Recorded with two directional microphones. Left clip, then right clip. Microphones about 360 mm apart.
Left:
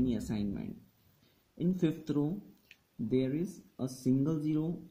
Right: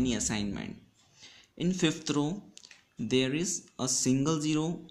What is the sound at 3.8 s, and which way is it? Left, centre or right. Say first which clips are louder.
Speech: right 4 dB; centre.